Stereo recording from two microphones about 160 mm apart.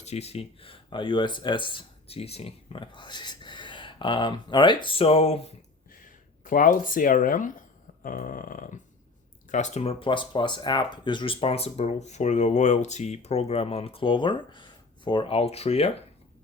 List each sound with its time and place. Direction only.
0.0 s speech: 40° left (ahead or behind)
5.9 s speech: 55° left (ahead or behind)
8.0 s a sound: 60° left (ahead or behind)
9.5 s speech: 45° left (ahead or behind)